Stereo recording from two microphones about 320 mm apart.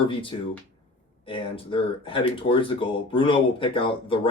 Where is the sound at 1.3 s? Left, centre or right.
Centre.